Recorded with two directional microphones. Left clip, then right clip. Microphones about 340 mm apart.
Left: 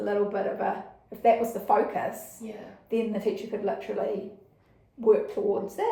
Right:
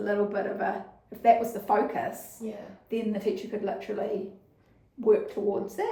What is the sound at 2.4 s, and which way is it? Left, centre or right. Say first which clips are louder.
Speech: right 5 dB; centre.